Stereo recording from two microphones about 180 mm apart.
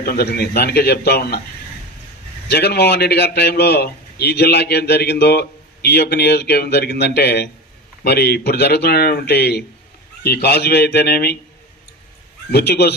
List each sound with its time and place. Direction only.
0.0 s a man's voice: 60° left (ahead or behind)
2.5 s a man's voice: 65° left (ahead or behind)
12.5 s a man's voice: 60° left (ahead or behind)